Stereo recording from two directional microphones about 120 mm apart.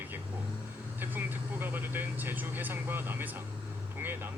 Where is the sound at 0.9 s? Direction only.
15° right (ahead or behind).